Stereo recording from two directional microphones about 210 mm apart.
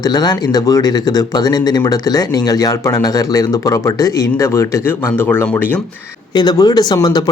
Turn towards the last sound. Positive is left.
turn(degrees=20)  # may be behind; listen again after turning